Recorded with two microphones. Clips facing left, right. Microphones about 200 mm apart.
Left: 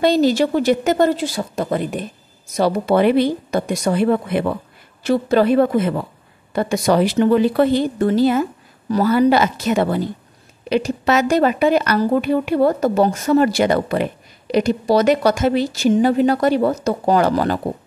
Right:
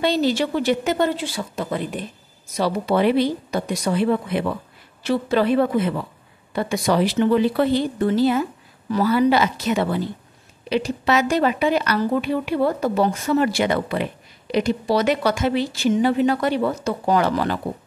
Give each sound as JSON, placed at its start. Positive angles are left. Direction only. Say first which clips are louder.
{"t": 0.0, "sound": "a woman's voice", "louder": "left 5 dB", "side_deg": 45}